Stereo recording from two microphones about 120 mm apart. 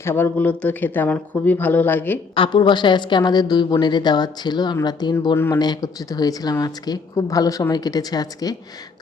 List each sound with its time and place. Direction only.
0.0 s speech: 20° left (ahead or behind)
2.3 s speech: 45° left (ahead or behind)